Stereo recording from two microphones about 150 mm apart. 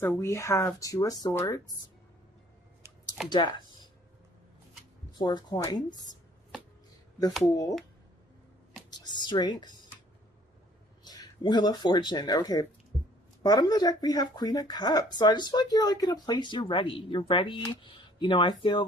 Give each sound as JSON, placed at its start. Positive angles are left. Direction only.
{"t": 0.0, "sound": "speech", "side_deg": 15}
{"t": 3.2, "sound": "speech", "side_deg": 30}
{"t": 5.1, "sound": "speech", "side_deg": 30}
{"t": 7.4, "sound": "speech", "side_deg": 25}
{"t": 8.9, "sound": "speech", "side_deg": 30}
{"t": 11.0, "sound": "speech", "side_deg": 25}